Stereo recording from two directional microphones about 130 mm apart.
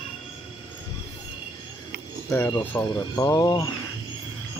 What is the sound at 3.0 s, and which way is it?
Speech, 30° left (ahead or behind).